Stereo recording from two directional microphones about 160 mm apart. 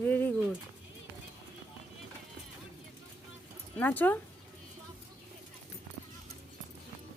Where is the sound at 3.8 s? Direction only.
10° left (ahead or behind).